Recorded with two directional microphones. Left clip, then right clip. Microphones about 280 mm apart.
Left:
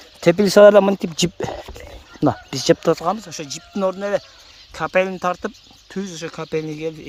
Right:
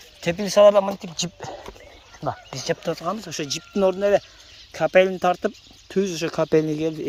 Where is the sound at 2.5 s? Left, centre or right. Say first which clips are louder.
Left 10 dB; left.